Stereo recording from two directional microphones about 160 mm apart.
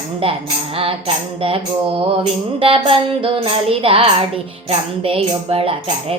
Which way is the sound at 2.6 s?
35° right (ahead or behind).